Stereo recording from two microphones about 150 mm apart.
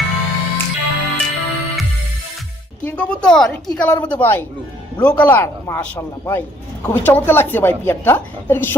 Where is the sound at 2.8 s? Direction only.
10° left (ahead or behind).